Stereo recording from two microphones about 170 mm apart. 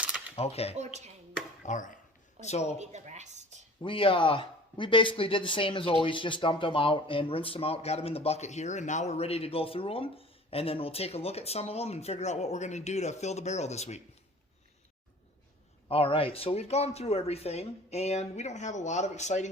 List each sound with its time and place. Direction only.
0.0 s camera: 10° right (ahead or behind)
0.3 s speech: 35° left (ahead or behind)
1.6 s speech: 50° left (ahead or behind)
2.7 s speech: 40° right (ahead or behind)
3.8 s speech: 30° left (ahead or behind)
15.9 s speech: 35° left (ahead or behind)